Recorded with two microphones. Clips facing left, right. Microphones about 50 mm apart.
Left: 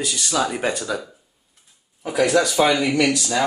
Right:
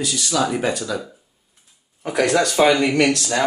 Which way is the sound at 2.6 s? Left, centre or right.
Right.